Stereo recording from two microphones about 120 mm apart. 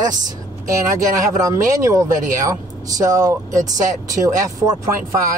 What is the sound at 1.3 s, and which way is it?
Speech, 25° right (ahead or behind).